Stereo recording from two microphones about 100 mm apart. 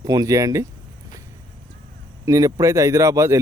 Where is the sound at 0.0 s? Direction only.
40° right (ahead or behind).